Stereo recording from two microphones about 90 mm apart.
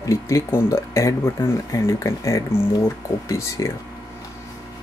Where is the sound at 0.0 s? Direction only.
35° left (ahead or behind).